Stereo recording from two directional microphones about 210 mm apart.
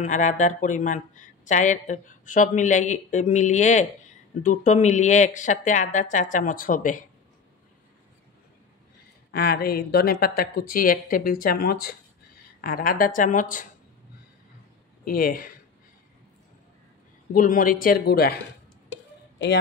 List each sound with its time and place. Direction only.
0.0 s a woman's voice: 35° left (ahead or behind)
9.3 s a woman's voice: 45° left (ahead or behind)
15.0 s speech: 45° left (ahead or behind)
17.3 s a woman's voice: 40° left (ahead or behind)
19.3 s a sound: 55° left (ahead or behind)